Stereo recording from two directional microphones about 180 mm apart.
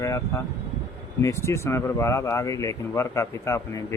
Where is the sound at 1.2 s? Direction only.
15° left (ahead or behind).